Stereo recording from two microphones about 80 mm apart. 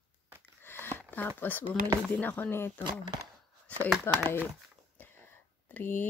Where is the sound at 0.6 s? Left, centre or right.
Left.